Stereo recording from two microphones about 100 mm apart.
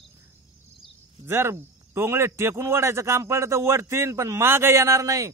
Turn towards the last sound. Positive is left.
turn(degrees=-30)  # may be behind; listen again after turning